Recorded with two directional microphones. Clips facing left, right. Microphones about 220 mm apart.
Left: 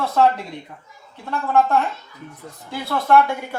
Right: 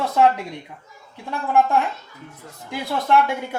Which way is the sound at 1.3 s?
10° right (ahead or behind).